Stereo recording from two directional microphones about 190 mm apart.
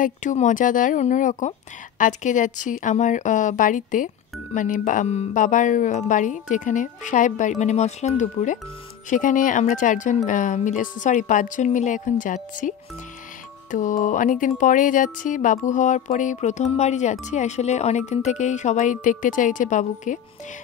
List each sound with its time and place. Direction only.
0.0 s speech: 40° left (ahead or behind)